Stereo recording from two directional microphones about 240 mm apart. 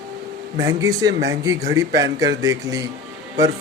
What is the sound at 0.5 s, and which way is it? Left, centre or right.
Speech, centre.